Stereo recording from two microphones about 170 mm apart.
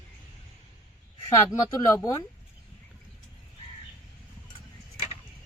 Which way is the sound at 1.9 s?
20° left (ahead or behind).